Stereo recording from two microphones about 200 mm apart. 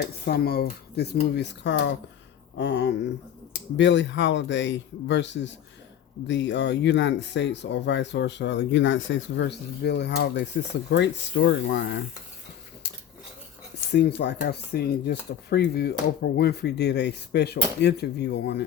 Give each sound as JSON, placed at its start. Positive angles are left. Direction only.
{"t": 0.0, "sound": "speech", "side_deg": 55}
{"t": 13.9, "sound": "speech", "side_deg": 55}